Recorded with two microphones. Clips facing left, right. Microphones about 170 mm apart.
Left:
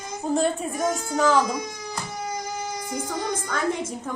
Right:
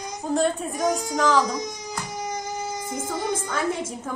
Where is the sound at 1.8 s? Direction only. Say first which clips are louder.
Right 1 dB; 20° right (ahead or behind).